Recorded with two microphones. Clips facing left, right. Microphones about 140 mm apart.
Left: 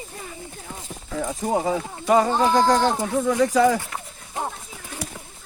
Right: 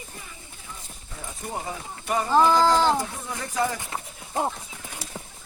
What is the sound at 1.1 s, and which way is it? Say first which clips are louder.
Speech: left 11 dB; 90° left.